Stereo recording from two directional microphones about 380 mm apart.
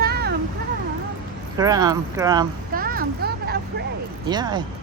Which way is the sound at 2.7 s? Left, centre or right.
Right.